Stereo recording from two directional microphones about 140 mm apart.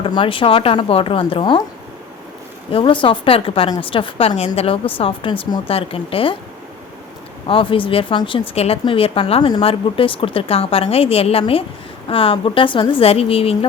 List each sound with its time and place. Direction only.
0.0 s speech: 35° left (ahead or behind)
2.6 s speech: 40° left (ahead or behind)
7.4 s a woman's voice: 40° left (ahead or behind)